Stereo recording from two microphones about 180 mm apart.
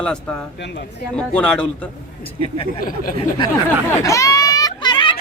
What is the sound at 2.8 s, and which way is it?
Speech, 50° left (ahead or behind).